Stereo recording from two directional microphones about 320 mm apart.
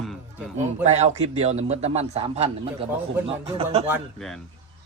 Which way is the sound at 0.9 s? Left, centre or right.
Right.